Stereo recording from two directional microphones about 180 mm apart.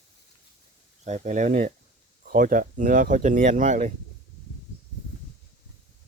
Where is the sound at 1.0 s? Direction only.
40° right (ahead or behind).